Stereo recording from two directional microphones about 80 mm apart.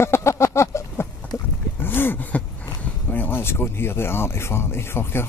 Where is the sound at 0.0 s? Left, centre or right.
Left.